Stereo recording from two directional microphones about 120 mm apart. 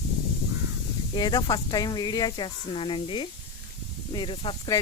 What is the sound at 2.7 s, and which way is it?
Speech, 45° left (ahead or behind).